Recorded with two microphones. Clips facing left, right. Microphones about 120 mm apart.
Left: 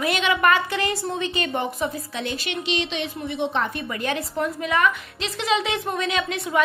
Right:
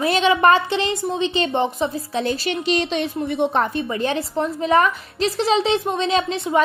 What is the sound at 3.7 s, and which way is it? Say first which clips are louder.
A woman's voice: right 5 dB; 30° right (ahead or behind).